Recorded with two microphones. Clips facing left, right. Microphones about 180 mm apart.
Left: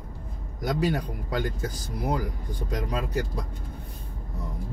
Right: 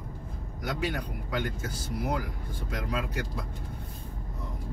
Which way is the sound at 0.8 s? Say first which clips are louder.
Left 5 dB; 40° left (ahead or behind).